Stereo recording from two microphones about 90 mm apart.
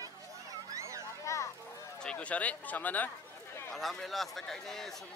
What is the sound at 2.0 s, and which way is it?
Speech, 15° left (ahead or behind).